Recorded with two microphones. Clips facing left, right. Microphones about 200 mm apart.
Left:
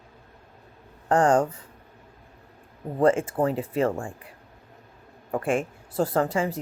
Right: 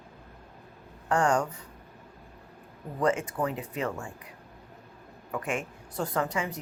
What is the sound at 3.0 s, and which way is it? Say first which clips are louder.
Speech: left 6 dB; 50° left (ahead or behind).